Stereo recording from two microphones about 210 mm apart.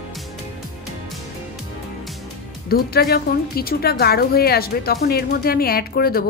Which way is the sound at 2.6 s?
45° left (ahead or behind).